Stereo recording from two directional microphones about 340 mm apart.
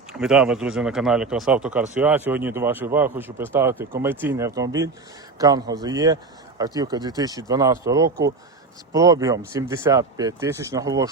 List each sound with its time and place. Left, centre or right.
0.1 s speech: centre